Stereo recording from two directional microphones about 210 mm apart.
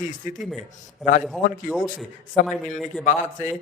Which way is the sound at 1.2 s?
Centre (ahead or behind).